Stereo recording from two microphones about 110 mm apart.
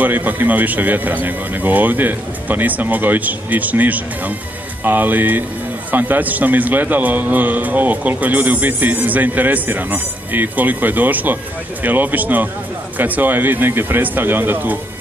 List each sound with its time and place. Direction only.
0.0 s a man's voice: 15° right (ahead or behind)